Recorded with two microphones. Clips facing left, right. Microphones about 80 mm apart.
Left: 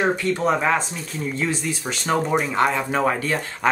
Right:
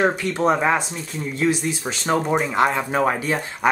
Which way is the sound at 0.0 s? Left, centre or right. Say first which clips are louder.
Right 1 dB; right.